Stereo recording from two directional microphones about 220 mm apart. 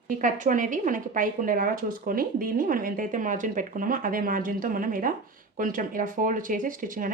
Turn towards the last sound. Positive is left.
turn(degrees=-40)  # may be behind; listen again after turning